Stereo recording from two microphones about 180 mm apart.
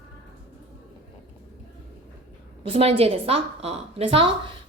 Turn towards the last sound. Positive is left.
turn(degrees=-30)  # may be behind; listen again after turning